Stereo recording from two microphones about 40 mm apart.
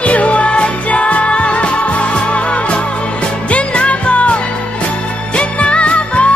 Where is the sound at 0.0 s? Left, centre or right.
Left.